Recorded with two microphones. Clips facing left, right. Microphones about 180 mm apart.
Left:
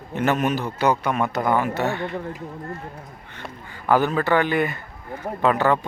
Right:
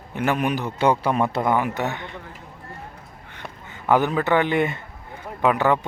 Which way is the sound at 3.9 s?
20° right (ahead or behind).